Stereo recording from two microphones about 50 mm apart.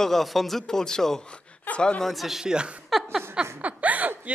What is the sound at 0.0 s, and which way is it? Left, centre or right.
Speech, centre.